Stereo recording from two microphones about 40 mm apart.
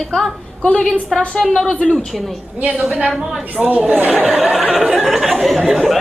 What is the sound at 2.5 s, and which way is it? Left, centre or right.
Speech, right.